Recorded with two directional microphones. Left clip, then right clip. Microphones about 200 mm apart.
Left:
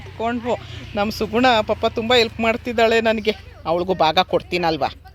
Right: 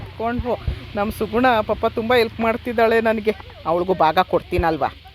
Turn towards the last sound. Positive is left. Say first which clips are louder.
# even
turn(degrees=0)  # may be behind; listen again after turning